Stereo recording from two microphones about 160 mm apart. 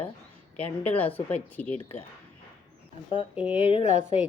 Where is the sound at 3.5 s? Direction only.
35° left (ahead or behind).